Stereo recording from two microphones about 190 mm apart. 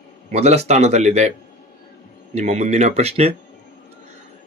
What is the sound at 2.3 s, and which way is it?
Speech, 35° right (ahead or behind).